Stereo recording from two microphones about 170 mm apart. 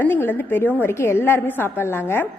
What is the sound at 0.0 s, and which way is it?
A woman's voice, 10° left (ahead or behind).